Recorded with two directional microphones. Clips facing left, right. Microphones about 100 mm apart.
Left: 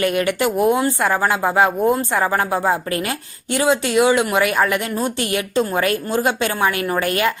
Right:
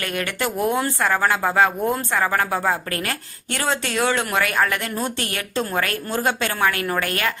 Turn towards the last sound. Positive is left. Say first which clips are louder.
# left 4 dB
turn(degrees=20)  # may be behind; listen again after turning